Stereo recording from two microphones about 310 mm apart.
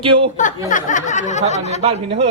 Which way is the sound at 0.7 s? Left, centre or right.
Left.